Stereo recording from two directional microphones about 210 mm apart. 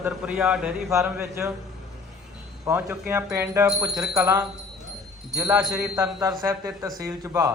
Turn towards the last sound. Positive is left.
turn(degrees=-15)  # may be behind; listen again after turning